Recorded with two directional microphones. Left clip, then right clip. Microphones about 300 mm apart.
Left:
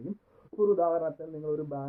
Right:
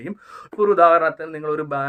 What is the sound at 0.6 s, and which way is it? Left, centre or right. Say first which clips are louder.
A man's voice: right 12 dB; right.